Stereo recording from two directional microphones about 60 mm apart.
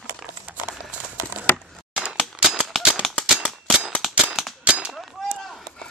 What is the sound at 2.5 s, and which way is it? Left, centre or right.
Cap gun, centre.